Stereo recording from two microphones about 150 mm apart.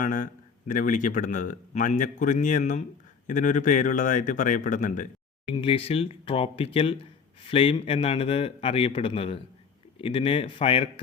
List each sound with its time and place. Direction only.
0.0 s a man's voice: 60° left (ahead or behind)
5.5 s speech: 35° left (ahead or behind)